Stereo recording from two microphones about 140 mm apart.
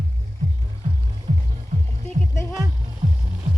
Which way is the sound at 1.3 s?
75° right (ahead or behind).